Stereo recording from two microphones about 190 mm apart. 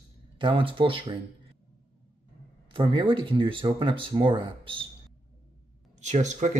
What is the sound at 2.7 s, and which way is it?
Speech, 25° right (ahead or behind).